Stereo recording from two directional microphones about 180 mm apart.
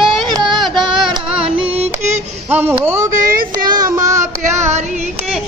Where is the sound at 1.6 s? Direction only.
35° right (ahead or behind).